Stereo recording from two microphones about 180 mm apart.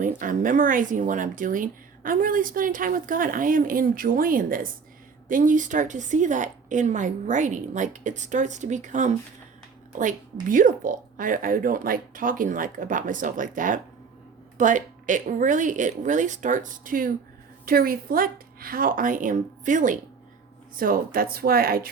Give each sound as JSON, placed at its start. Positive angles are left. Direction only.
{"t": 0.0, "sound": "speech", "side_deg": -45}
{"t": 10.4, "sound": "speech", "side_deg": -50}